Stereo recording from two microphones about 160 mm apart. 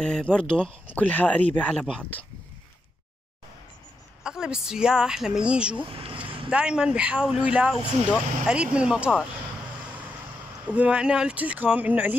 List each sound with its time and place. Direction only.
0.0 s speech: 5° left (ahead or behind)
4.2 s speech: 5° right (ahead or behind)
5.9 s a sound: 35° right (ahead or behind)
6.5 s speech: 5° right (ahead or behind)
10.7 s speech: 5° right (ahead or behind)